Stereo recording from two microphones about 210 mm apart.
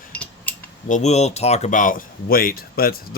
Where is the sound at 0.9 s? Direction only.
35° left (ahead or behind).